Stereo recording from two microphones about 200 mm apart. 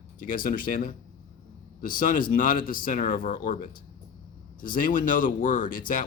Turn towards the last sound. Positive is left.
turn(degrees=45)  # may be behind; listen again after turning